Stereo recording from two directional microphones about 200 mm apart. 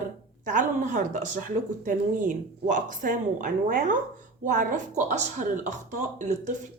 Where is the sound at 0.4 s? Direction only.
40° right (ahead or behind).